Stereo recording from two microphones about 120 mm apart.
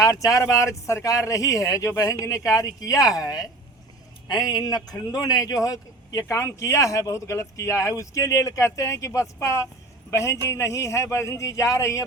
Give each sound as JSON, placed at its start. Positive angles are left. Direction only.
{"t": 0.0, "sound": "speech", "side_deg": 30}